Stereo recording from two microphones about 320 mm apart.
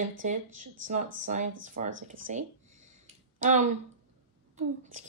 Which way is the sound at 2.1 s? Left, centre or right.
Right.